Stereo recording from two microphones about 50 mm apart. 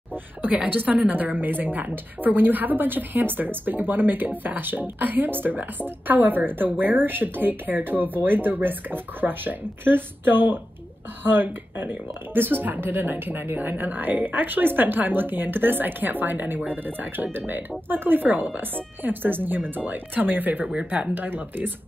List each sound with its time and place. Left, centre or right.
0.1 s a woman's voice: right
20.7 s speech: right
21.1 s speech: right